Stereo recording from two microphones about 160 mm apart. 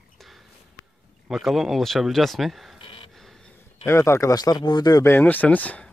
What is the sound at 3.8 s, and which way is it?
Speech, 15° left (ahead or behind).